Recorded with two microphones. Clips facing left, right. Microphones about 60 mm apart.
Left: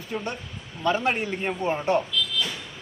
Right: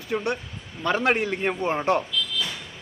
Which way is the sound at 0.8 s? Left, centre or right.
Right.